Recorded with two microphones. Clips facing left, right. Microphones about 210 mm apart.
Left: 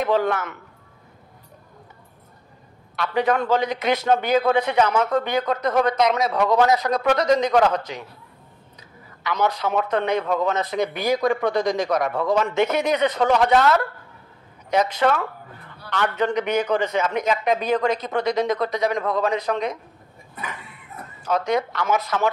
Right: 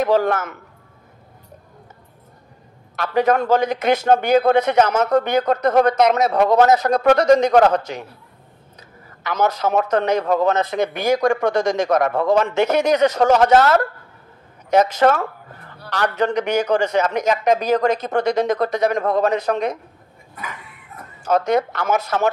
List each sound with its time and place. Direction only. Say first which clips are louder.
0.0 s a man's voice: right 3 dB; 45° right (ahead or behind)
3.0 s a man's voice: right 4 dB; 45° right (ahead or behind)
10.6 s a man's voice: right 3 dB; 50° right (ahead or behind); by 13.0 s 75° right (ahead or behind)
13.2 s a man's voice: right 3 dB; 45° right (ahead or behind)
21.2 s a man's voice: right 4 dB; 45° right (ahead or behind)